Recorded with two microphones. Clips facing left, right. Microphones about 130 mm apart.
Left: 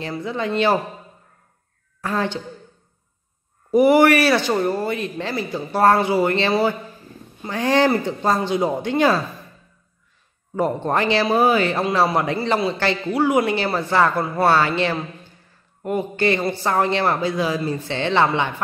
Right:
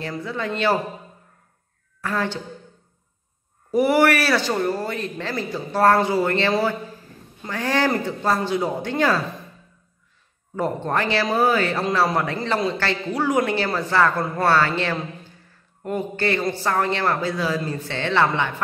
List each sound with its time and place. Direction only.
0.2 s speech: 20° left (ahead or behind)
2.0 s a woman's voice: 20° left (ahead or behind)
3.7 s a man's voice: 15° left (ahead or behind)
10.5 s a man's voice: 20° left (ahead or behind)